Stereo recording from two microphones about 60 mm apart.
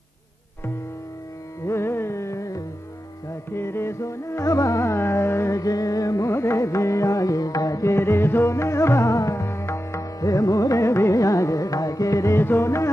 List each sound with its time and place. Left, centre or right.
1.7 s carnatic music: left
3.3 s music: left
5.6 s music: left
7.9 s music: left
12.4 s music: left